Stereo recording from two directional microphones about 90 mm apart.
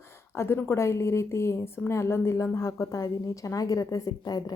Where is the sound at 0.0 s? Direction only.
30° left (ahead or behind).